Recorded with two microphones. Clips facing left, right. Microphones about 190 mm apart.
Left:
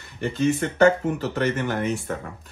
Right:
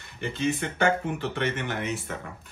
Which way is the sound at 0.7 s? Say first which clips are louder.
Left 7 dB; 40° left (ahead or behind).